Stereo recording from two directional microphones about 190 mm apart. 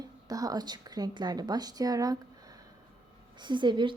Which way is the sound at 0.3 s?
20° right (ahead or behind).